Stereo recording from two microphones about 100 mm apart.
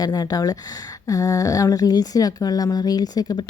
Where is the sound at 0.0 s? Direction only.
40° left (ahead or behind).